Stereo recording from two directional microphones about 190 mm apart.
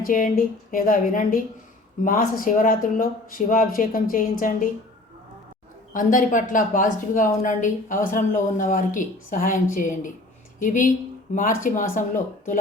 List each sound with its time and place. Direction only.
0.0 s speech: 50° left (ahead or behind)
5.9 s speech: 45° left (ahead or behind)